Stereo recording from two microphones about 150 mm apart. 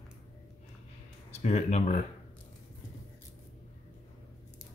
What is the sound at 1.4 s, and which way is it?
Speech, 50° left (ahead or behind).